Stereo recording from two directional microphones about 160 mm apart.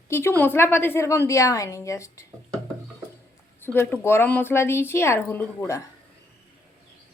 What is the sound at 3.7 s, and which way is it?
Speech, 10° left (ahead or behind).